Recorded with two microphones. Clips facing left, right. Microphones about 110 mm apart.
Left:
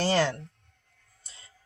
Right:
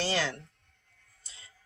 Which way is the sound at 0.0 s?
45° left (ahead or behind).